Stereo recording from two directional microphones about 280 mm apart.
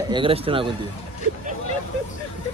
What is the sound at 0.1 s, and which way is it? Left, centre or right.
Speech, centre.